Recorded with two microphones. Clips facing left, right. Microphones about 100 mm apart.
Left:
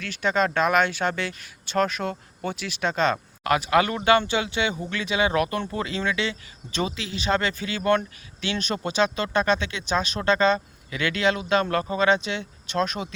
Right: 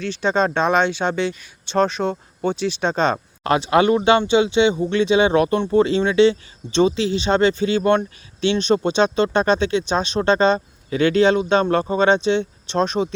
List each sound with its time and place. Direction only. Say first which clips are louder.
0.0 s speech: right 4 dB; 30° right (ahead or behind)